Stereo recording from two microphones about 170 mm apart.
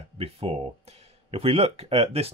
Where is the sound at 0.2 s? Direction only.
35° right (ahead or behind).